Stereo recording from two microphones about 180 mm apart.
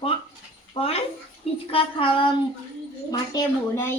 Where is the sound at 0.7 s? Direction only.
30° left (ahead or behind).